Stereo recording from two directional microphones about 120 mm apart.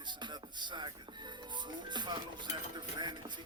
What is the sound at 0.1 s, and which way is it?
Speech, 40° right (ahead or behind).